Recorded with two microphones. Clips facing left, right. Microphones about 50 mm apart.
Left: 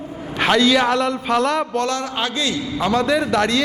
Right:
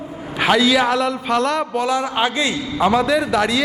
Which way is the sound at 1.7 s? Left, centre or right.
Centre.